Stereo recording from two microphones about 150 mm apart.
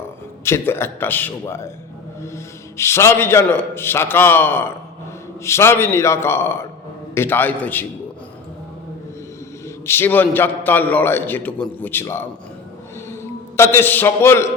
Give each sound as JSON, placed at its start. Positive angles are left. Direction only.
{"t": 0.4, "sound": "a man's voice", "side_deg": 15}
{"t": 2.7, "sound": "a man's voice", "side_deg": 15}
{"t": 9.8, "sound": "a man's voice", "side_deg": 15}
{"t": 13.6, "sound": "a man's voice", "side_deg": 15}